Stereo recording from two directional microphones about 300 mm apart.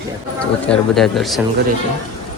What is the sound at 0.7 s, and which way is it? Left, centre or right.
Speech, centre.